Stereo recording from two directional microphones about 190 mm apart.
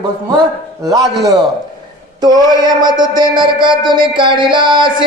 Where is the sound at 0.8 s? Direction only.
20° right (ahead or behind).